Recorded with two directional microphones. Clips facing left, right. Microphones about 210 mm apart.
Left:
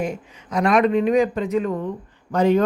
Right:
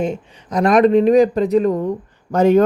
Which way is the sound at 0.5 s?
40° right (ahead or behind).